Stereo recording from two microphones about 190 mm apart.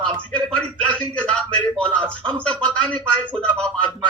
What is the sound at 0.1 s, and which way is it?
Speech, 25° right (ahead or behind).